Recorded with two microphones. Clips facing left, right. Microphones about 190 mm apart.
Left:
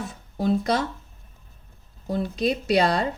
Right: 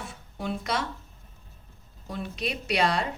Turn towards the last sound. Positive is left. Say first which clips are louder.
# left 5 dB
turn(degrees=35)  # may be behind; listen again after turning